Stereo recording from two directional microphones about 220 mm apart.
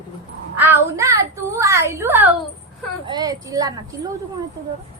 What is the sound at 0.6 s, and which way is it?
A woman's voice, 10° right (ahead or behind).